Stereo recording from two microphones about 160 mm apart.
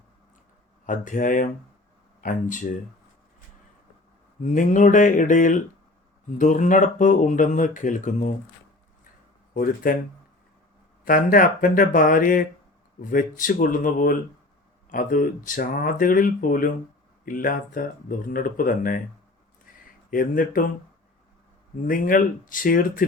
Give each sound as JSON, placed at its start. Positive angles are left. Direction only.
{"t": 0.9, "sound": "speech", "side_deg": 55}
{"t": 4.4, "sound": "speech", "side_deg": 50}
{"t": 9.6, "sound": "speech", "side_deg": 60}
{"t": 11.0, "sound": "speech", "side_deg": 60}
{"t": 20.1, "sound": "speech", "side_deg": 60}
{"t": 21.8, "sound": "speech", "side_deg": 60}